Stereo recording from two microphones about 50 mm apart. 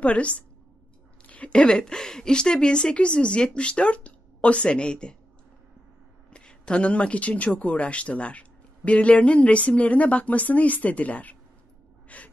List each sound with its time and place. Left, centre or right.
0.0 s speech: left
6.3 s speech: centre
12.1 s gasp: left